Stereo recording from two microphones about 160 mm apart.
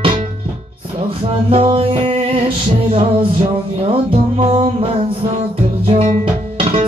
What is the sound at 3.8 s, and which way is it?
Music, 35° right (ahead or behind).